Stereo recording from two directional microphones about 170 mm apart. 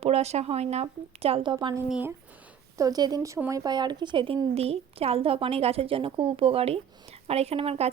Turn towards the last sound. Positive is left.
turn(degrees=-35)  # may be behind; listen again after turning